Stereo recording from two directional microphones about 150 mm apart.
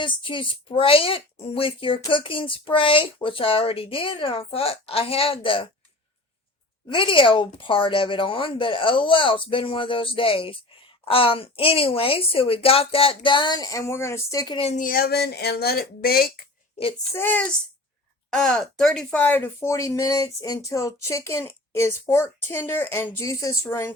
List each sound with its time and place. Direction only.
0.0 s speech: 35° left (ahead or behind)
6.8 s speech: 35° left (ahead or behind)
14.8 s speech: 75° left (ahead or behind); by 16.3 s 90° left
17.2 s speech: 10° left (ahead or behind)